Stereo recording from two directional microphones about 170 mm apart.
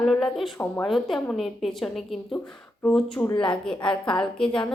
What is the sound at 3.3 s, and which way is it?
Speech, 30° left (ahead or behind).